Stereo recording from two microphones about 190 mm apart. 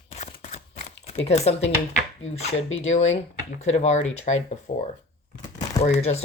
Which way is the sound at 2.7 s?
35° left (ahead or behind).